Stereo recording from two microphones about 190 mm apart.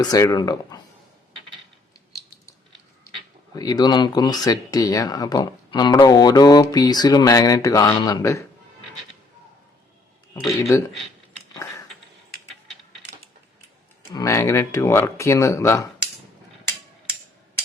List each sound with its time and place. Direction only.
0.0 s speech: 20° left (ahead or behind)
3.5 s speech: 20° left (ahead or behind)
10.3 s speech: 15° left (ahead or behind)
14.1 s speech: 20° left (ahead or behind)